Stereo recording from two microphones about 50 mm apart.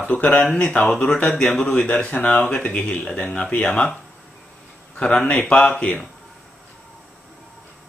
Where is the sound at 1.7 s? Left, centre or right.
Left.